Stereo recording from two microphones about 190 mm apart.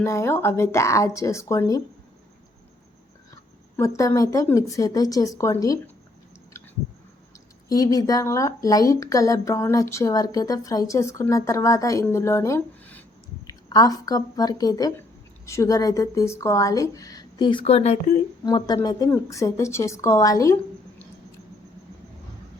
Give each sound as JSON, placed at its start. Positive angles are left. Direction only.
{"t": 0.0, "sound": "speech", "side_deg": 15}
{"t": 3.8, "sound": "speech", "side_deg": 15}
{"t": 7.7, "sound": "speech", "side_deg": 20}
{"t": 13.5, "sound": "a woman's voice", "side_deg": 20}
{"t": 18.4, "sound": "speech", "side_deg": 20}